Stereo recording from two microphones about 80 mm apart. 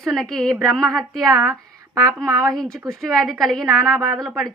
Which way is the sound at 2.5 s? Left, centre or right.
Centre.